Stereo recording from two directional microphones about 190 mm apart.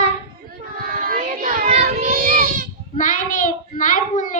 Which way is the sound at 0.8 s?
45° right (ahead or behind).